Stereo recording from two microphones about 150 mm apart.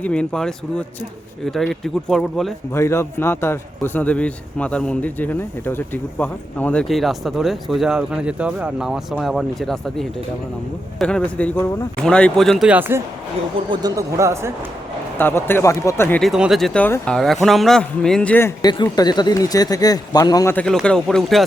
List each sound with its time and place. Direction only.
0.0 s a man's voice: 5° left (ahead or behind)
2.7 s a man's voice: 20° left (ahead or behind); by 13.0 s 10° right (ahead or behind)
13.7 s speech: 25° right (ahead or behind)
15.2 s speech: 15° left (ahead or behind)
16.2 s a man's voice: centre (ahead or behind)
18.6 s speech: 30° left (ahead or behind)
20.6 s a man's voice: 5° left (ahead or behind)